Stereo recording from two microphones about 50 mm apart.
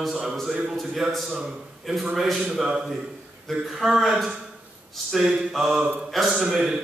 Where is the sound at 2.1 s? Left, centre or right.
Centre.